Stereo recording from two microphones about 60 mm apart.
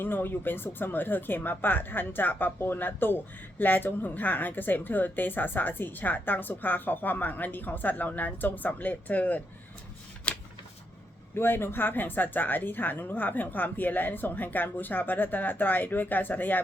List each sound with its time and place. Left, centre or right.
0.0 s a woman's voice: left
10.3 s a sound: centre
11.3 s a woman's voice: left